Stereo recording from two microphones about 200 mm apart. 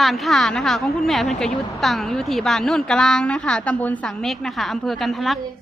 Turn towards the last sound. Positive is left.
turn(degrees=0)  # may be behind; listen again after turning